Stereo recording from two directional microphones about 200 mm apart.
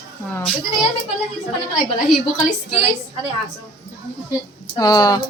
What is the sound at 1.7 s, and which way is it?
Speech, centre (ahead or behind).